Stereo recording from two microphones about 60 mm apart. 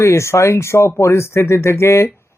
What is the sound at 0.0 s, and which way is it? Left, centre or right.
Speech, left.